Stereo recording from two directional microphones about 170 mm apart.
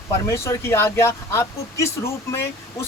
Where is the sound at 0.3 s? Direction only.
15° left (ahead or behind).